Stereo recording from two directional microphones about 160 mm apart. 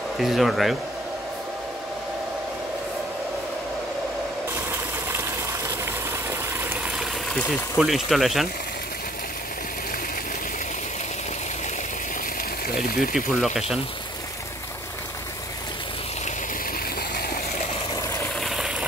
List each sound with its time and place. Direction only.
0.2 s speech: centre (ahead or behind)
4.6 s water: 15° right (ahead or behind)
6.6 s a sound: 10° right (ahead or behind)
7.3 s speech: centre (ahead or behind)
12.8 s speech: 65° left (ahead or behind)
13.1 s speech: centre (ahead or behind)
17.1 s stream: 70° left (ahead or behind)
18.4 s a sound: centre (ahead or behind)